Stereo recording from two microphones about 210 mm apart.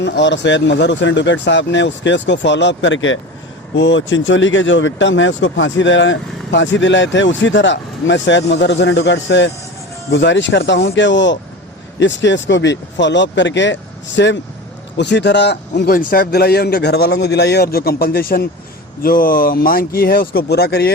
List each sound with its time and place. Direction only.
0.0 s speech: 60° left (ahead or behind)